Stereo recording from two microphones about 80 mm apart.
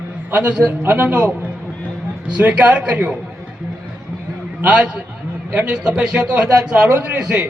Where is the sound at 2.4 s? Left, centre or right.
Centre.